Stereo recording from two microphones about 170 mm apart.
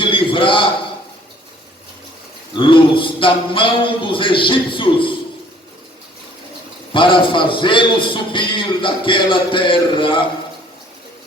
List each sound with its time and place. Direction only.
0.0 s a sound: 30° left (ahead or behind)
2.6 s a man's voice: 30° left (ahead or behind)
6.9 s a man's voice: 30° left (ahead or behind)